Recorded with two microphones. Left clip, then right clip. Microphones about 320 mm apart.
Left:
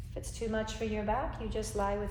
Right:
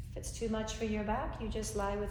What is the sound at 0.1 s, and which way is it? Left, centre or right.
A woman's voice, left.